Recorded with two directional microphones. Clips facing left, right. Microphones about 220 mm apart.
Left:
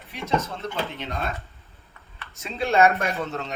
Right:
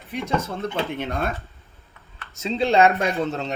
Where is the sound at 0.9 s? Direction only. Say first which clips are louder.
Right 6 dB; 50° right (ahead or behind).